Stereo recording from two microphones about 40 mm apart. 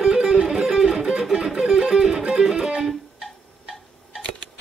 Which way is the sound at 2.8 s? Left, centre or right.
Centre.